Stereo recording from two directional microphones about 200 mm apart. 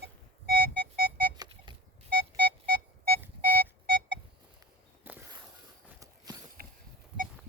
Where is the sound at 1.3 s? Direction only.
20° right (ahead or behind).